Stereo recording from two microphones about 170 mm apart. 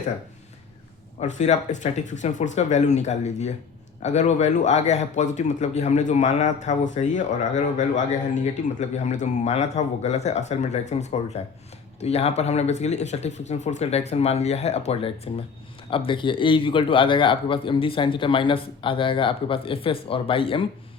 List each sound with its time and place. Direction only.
1.2 s a man's voice: 45° left (ahead or behind)